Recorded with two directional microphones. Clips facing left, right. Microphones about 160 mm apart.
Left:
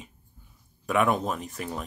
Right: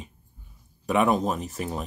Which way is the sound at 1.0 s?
35° right (ahead or behind).